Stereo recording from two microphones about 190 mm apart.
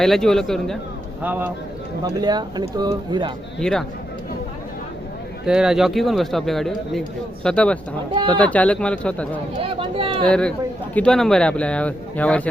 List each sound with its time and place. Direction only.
0.0 s speech: centre (ahead or behind)
1.2 s speech: 10° right (ahead or behind)
2.0 s speech: 20° right (ahead or behind)
3.6 s speech: 5° left (ahead or behind)
5.5 s speech: 5° right (ahead or behind)
9.6 s speech: 30° right (ahead or behind)
10.2 s speech: 5° left (ahead or behind)